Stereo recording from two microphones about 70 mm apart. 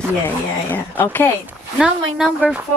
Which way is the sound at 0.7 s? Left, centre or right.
Left.